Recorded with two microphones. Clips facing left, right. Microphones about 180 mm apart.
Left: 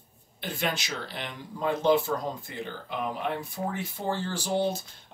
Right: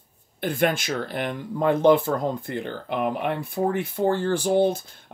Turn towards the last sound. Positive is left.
turn(degrees=-55)  # may be behind; listen again after turning